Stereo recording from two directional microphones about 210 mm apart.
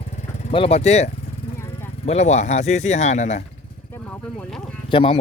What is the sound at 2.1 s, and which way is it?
Speech, 30° left (ahead or behind).